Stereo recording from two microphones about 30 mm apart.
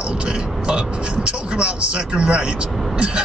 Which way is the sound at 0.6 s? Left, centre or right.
Right.